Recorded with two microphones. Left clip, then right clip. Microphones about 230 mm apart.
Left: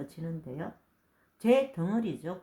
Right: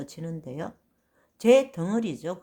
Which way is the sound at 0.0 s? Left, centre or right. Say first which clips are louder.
Right 4 dB; right.